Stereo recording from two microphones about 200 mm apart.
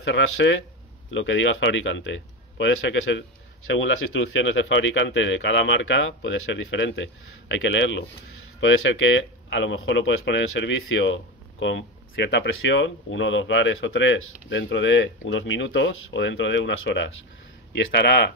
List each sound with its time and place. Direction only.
0.0 s speech: 70° left (ahead or behind)
17.7 s speech: 55° left (ahead or behind)